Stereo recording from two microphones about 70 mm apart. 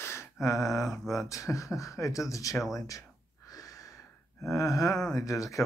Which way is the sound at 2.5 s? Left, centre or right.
Centre.